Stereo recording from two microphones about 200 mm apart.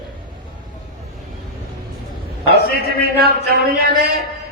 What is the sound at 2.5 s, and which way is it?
A man's voice, 55° right (ahead or behind).